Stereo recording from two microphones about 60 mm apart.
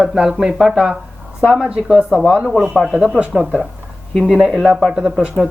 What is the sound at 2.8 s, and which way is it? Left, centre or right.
Speech, centre.